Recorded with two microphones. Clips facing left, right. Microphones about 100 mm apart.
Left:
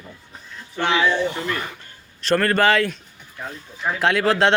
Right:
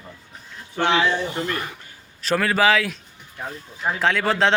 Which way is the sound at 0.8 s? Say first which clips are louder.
Even; 30° right (ahead or behind).